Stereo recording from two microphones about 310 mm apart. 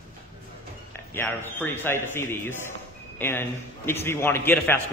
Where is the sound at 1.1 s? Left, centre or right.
Centre.